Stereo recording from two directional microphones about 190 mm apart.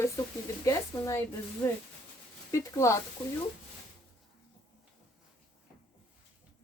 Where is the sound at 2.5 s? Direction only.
15° left (ahead or behind).